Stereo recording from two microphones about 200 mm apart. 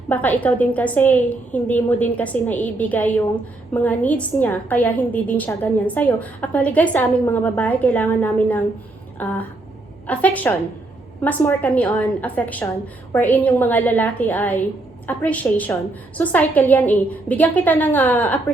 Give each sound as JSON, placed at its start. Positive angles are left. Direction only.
{"t": 0.1, "sound": "a woman's voice", "side_deg": 10}
{"t": 9.1, "sound": "a sound", "side_deg": 10}
{"t": 10.1, "sound": "a woman's voice", "side_deg": 5}